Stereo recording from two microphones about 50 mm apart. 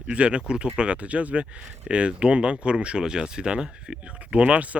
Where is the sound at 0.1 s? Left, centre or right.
Right.